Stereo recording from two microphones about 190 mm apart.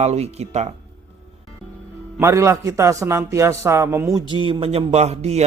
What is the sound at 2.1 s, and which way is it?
A man's voice, 15° right (ahead or behind).